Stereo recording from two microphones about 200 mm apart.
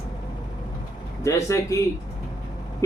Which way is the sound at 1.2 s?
15° left (ahead or behind).